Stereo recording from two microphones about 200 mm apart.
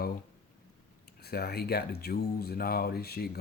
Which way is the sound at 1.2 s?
50° left (ahead or behind).